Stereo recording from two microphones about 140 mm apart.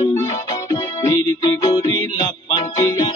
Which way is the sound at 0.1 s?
25° left (ahead or behind).